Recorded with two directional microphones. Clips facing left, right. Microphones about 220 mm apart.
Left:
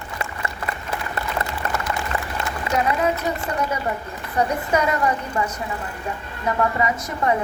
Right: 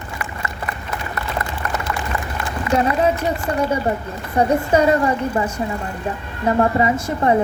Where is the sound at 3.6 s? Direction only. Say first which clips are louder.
Right 5 dB; 30° right (ahead or behind).